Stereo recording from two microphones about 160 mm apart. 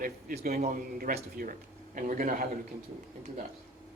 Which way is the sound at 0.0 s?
65° right (ahead or behind).